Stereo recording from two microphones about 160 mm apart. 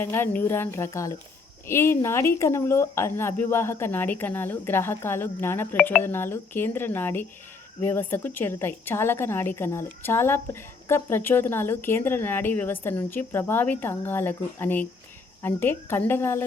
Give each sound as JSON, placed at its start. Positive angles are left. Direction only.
{"t": 0.0, "sound": "a woman's voice", "side_deg": 15}